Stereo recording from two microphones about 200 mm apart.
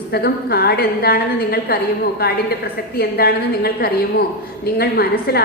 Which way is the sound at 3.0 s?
50° left (ahead or behind).